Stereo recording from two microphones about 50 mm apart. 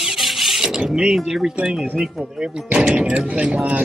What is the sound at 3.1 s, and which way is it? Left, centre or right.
Speech, right.